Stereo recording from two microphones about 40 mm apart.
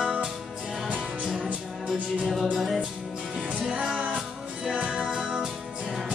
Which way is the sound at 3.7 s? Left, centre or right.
Right.